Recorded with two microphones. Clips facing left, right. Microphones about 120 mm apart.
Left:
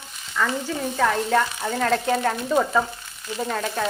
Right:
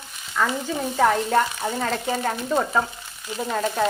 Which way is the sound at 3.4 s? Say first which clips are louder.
Right 1 dB; 5° right (ahead or behind).